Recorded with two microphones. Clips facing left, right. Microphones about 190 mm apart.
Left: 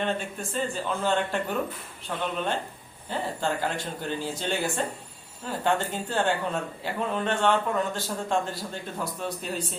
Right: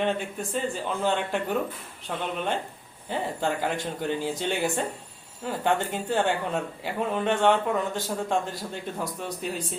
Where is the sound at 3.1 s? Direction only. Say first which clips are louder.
Right 1 dB; 15° right (ahead or behind).